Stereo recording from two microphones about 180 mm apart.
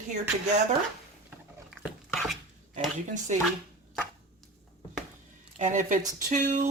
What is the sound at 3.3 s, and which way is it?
Speech, 40° right (ahead or behind).